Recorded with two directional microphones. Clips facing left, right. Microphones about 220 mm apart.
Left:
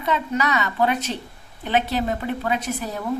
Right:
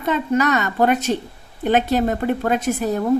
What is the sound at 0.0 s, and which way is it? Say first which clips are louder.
Speech: right 5 dB; 50° right (ahead or behind).